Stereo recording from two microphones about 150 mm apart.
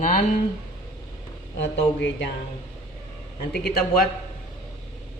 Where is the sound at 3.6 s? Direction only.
90° left.